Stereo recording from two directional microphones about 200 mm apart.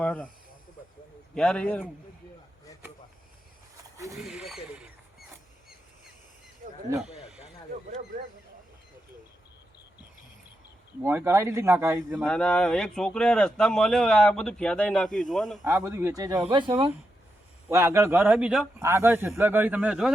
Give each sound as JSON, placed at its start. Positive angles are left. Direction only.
{"t": 0.0, "sound": "speech", "side_deg": 5}
{"t": 1.4, "sound": "speech", "side_deg": 5}
{"t": 4.2, "sound": "speech", "side_deg": -5}
{"t": 7.0, "sound": "a sound", "side_deg": -5}
{"t": 11.0, "sound": "a man's voice", "side_deg": -10}
{"t": 12.2, "sound": "speech", "side_deg": 5}
{"t": 15.6, "sound": "a man's voice", "side_deg": -15}
{"t": 17.7, "sound": "a man's voice", "side_deg": -15}